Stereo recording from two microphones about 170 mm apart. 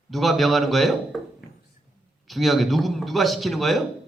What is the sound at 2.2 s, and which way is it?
A man's voice, centre (ahead or behind).